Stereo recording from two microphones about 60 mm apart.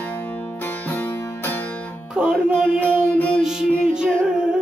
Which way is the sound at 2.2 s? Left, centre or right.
Centre.